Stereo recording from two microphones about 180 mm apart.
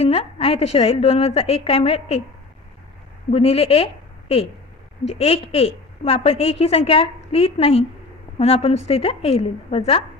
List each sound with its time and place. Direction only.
0.0 s a woman's voice: 35° left (ahead or behind)
3.3 s a woman's voice: 35° left (ahead or behind)